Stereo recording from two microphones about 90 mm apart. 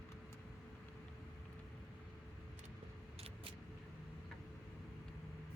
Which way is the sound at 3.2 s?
90° right.